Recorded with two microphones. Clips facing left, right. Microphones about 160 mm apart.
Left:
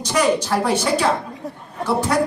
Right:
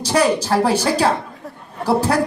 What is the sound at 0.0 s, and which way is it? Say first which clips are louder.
Speech: right 2 dB; 35° right (ahead or behind).